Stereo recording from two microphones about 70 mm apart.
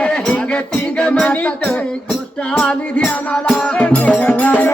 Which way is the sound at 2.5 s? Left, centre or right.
Centre.